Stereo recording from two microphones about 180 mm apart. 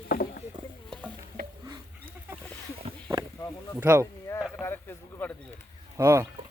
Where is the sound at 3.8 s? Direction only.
10° right (ahead or behind).